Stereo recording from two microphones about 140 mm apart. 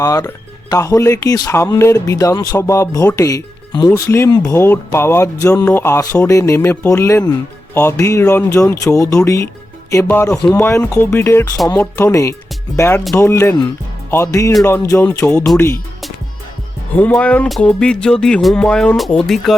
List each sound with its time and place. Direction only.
0.0 s speech: 25° left (ahead or behind)
10.6 s music: 15° left (ahead or behind)
11.9 s speech: 20° left (ahead or behind)
12.7 s music: 20° left (ahead or behind)
13.1 s speech: 20° left (ahead or behind)
14.6 s music: 20° left (ahead or behind)
17.0 s music: 10° left (ahead or behind)